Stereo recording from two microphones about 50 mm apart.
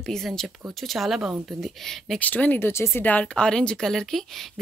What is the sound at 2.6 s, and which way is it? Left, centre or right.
Speech, left.